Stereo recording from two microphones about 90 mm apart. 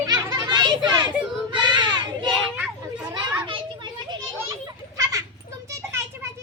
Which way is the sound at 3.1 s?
55° right (ahead or behind).